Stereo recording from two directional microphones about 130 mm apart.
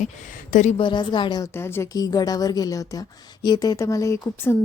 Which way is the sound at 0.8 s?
35° left (ahead or behind).